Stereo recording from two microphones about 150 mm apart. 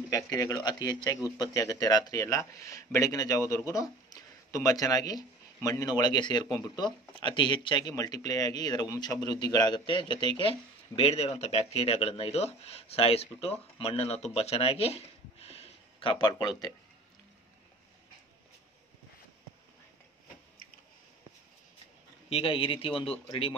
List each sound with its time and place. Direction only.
0.1 s speech: 25° left (ahead or behind)
22.3 s speech: 40° left (ahead or behind)